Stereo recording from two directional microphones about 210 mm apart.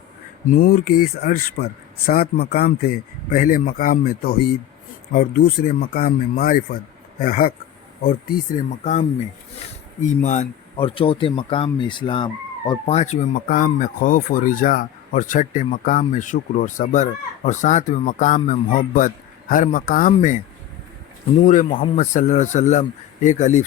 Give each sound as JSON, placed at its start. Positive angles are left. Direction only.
{"t": 0.4, "sound": "speech", "side_deg": 40}
{"t": 21.4, "sound": "speech", "side_deg": 40}